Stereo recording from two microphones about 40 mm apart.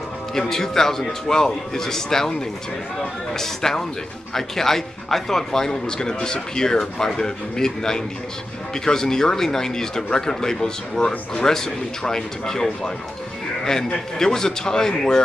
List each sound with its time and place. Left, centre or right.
0.3 s a man's voice: centre
3.3 s a man's voice: centre
14.1 s a man's voice: centre